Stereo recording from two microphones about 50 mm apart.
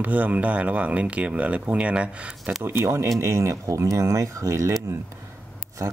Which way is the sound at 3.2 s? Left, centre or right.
Right.